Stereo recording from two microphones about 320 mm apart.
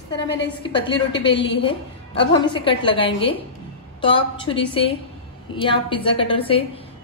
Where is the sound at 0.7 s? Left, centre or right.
Centre.